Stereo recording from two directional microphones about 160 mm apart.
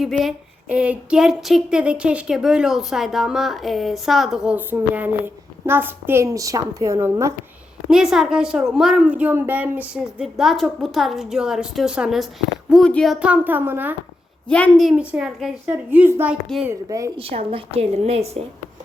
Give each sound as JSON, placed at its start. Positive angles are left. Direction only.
{"t": 0.0, "sound": "speech", "side_deg": 0}
{"t": 7.9, "sound": "speech", "side_deg": -5}
{"t": 14.4, "sound": "speech", "side_deg": 5}
{"t": 17.2, "sound": "a woman's voice", "side_deg": -35}